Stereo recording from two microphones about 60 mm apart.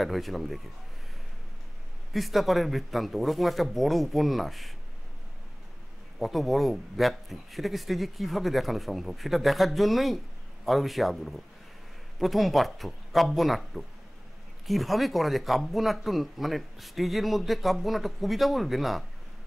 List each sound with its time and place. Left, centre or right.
0.0 s a man's voice: centre
2.1 s a man's voice: centre
6.1 s a man's voice: centre